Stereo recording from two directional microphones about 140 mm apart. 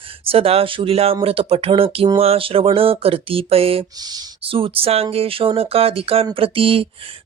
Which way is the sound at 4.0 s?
30° right (ahead or behind).